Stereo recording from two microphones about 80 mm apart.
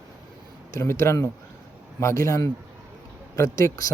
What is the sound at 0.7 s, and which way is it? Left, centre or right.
A man's voice, left.